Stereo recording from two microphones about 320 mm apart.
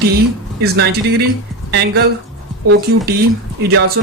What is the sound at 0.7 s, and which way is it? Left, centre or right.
Speech, right.